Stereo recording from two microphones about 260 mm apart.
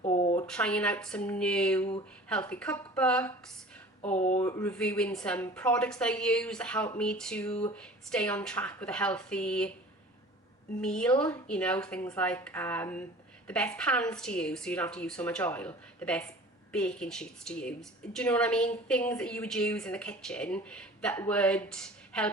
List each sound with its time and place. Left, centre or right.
0.0 s a sound: left
0.4 s a woman's voice: centre
4.0 s speech: left
4.4 s a woman's voice: centre
10.8 s a woman's voice: centre